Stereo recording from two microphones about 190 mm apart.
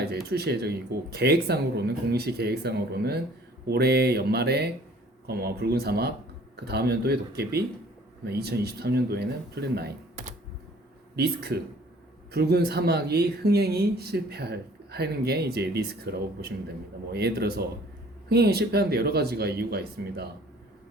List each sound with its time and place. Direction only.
0.0 s speech: 60° right (ahead or behind)
11.1 s speech: 60° right (ahead or behind)